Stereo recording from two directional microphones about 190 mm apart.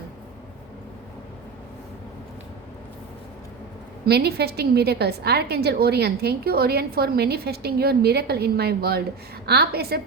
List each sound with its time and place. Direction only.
4.0 s a woman's voice: 60° right (ahead or behind)